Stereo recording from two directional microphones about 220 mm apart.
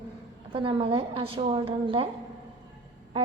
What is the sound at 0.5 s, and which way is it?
A woman's voice, 25° right (ahead or behind).